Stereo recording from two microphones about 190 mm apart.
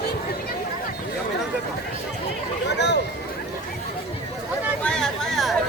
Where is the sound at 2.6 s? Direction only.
65° left (ahead or behind).